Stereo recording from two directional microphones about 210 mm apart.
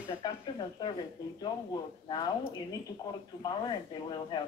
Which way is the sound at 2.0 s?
20° left (ahead or behind).